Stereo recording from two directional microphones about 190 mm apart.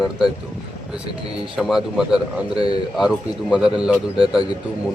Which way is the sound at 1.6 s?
Centre (ahead or behind).